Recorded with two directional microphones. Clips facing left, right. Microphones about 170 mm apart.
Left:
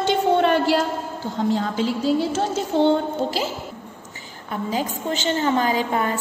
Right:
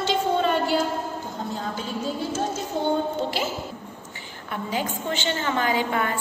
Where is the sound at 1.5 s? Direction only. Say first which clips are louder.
Left 9 dB; 90° left.